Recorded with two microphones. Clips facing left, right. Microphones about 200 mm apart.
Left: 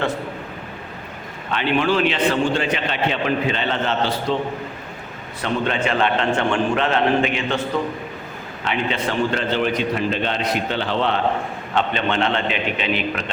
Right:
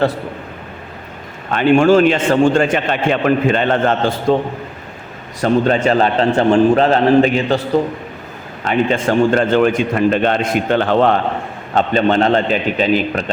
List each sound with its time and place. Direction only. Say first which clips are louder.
1.5 s a man's voice: right 9 dB; 45° right (ahead or behind)
5.4 s a man's voice: right 8 dB; 40° right (ahead or behind)
8.6 s a man's voice: right 8 dB; 45° right (ahead or behind)